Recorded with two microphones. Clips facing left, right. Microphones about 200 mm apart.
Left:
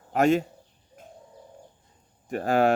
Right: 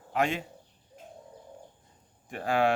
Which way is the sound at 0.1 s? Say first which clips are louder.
Left 8 dB; 45° left (ahead or behind).